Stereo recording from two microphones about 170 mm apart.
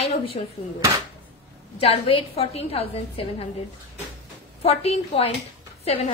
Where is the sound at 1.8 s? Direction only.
35° left (ahead or behind).